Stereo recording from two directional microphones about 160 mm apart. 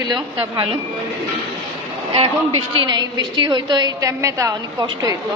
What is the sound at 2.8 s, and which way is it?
A woman's voice, 30° right (ahead or behind).